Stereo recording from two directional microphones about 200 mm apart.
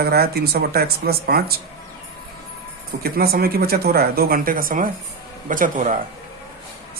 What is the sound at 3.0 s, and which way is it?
Speech, 50° right (ahead or behind).